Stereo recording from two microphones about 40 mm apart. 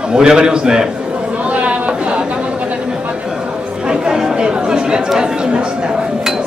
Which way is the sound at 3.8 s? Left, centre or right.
Centre.